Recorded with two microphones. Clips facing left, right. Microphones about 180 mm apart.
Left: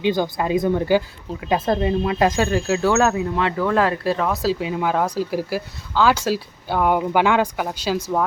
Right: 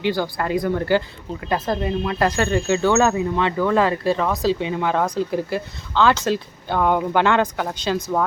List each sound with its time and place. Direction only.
0.0 s speech: 20° left (ahead or behind)
1.6 s speech: 25° left (ahead or behind)
2.5 s speech: 5° left (ahead or behind)